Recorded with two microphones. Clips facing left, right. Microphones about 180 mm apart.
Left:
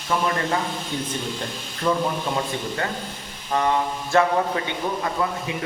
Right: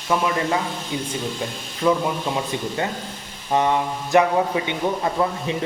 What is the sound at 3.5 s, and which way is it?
Speech, 20° right (ahead or behind).